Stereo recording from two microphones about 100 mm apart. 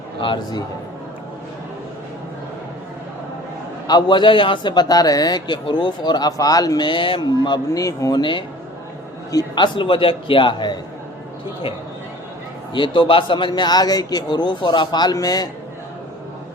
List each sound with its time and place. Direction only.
0.2 s a man's voice: 55° left (ahead or behind)
3.8 s a man's voice: 50° left (ahead or behind)
6.8 s a man's voice: 55° left (ahead or behind)
7.7 s speech: 35° left (ahead or behind)
8.2 s a man's voice: 55° left (ahead or behind)
9.6 s a man's voice: 55° left (ahead or behind)
12.7 s a man's voice: 55° left (ahead or behind)